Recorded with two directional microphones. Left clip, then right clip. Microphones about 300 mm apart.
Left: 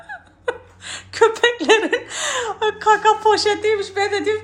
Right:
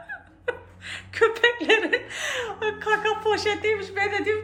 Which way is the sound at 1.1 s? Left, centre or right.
Centre.